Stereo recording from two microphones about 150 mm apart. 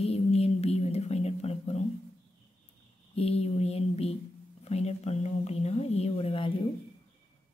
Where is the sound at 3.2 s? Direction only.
45° left (ahead or behind).